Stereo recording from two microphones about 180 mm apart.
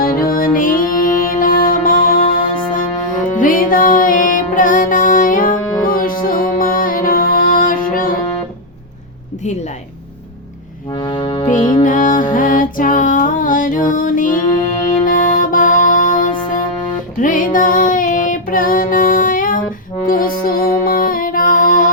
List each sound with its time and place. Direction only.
0.0 s music: 55° left (ahead or behind)
10.9 s music: 30° left (ahead or behind)
11.7 s music: 45° left (ahead or behind)